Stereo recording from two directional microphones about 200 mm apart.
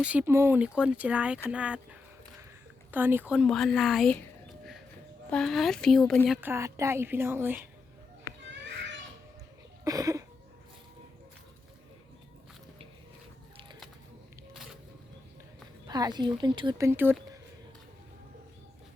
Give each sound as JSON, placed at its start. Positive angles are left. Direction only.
{"t": 0.0, "sound": "a woman's voice", "side_deg": -5}
{"t": 9.8, "sound": "a sound", "side_deg": -15}
{"t": 14.5, "sound": "music", "side_deg": 0}
{"t": 15.9, "sound": "speech", "side_deg": -20}